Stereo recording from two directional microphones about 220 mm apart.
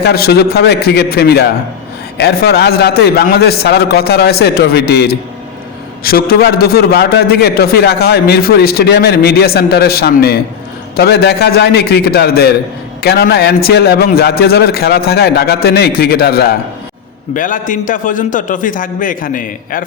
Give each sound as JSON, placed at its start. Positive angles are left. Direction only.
{"t": 0.0, "sound": "a man's voice", "side_deg": 45}